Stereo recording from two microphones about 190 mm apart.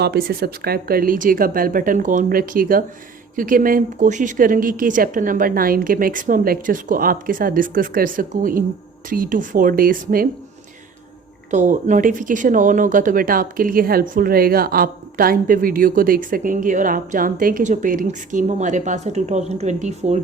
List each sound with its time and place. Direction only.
0.0 s speech: 55° right (ahead or behind)
11.5 s speech: 40° right (ahead or behind)